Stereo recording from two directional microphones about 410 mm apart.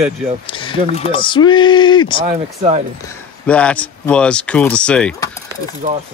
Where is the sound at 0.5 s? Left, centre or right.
Centre.